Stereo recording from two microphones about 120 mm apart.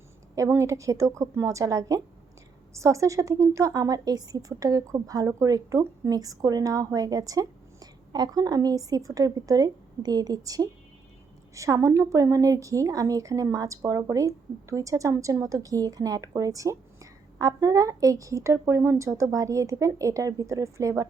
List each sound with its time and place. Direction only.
0.3 s a woman's voice: 25° right (ahead or behind)